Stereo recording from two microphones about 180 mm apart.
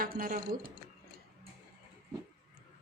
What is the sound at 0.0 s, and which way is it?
Speech, 50° right (ahead or behind).